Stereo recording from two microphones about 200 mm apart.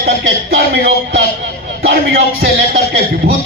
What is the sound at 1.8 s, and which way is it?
A man's voice, 50° right (ahead or behind).